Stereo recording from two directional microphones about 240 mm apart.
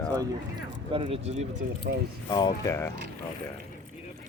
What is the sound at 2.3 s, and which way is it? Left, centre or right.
Speech, centre.